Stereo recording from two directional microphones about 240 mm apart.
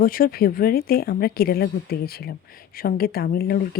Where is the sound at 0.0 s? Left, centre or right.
Left.